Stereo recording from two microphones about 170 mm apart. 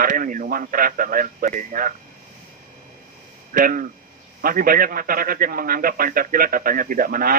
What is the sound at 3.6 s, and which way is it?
A man's voice, 55° right (ahead or behind).